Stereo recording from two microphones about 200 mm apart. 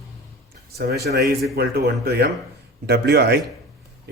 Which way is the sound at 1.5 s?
50° right (ahead or behind).